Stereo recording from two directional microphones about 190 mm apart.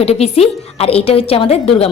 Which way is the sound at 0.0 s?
35° left (ahead or behind).